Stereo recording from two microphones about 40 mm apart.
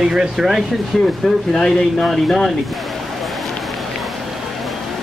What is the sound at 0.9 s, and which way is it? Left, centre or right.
Speech, centre.